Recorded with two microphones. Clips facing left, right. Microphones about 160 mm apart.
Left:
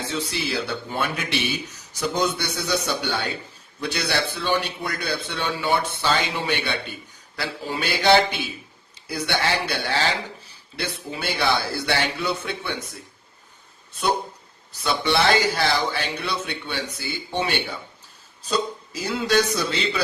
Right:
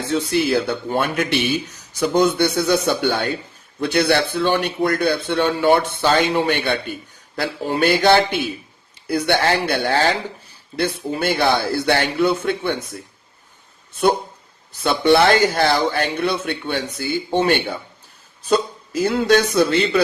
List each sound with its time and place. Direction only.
0.1 s speech: 50° right (ahead or behind)
14.7 s speech: 50° right (ahead or behind)
19.0 s speech: 55° right (ahead or behind)